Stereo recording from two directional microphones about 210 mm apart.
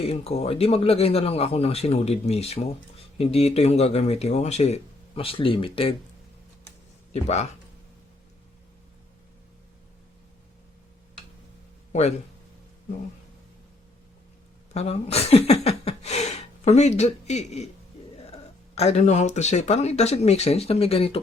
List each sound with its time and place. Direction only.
0.0 s speech: 30° left (ahead or behind)
7.1 s speech: 30° left (ahead or behind)
11.9 s speech: 30° left (ahead or behind)
14.7 s speech: 30° left (ahead or behind)